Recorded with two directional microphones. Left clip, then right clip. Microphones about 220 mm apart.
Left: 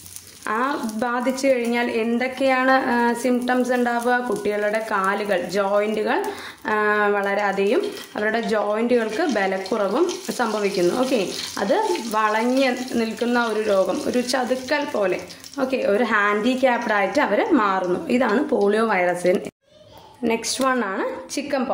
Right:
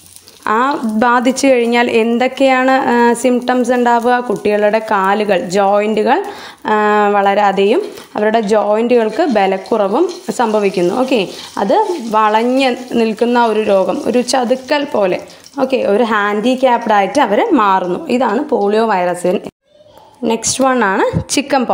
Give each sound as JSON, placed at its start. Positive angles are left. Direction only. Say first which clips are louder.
{"t": 0.5, "sound": "a woman's voice", "louder": "right 9 dB", "side_deg": -30}
{"t": 20.8, "sound": "a woman's voice", "louder": "right 12 dB", "side_deg": -40}